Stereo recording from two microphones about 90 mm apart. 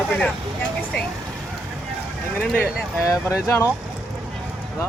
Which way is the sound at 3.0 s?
35° left (ahead or behind).